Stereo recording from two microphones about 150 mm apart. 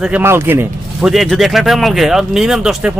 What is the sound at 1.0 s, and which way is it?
A man's voice, centre (ahead or behind).